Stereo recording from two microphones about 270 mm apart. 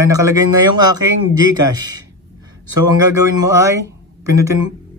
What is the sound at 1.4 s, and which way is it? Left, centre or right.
Speech, left.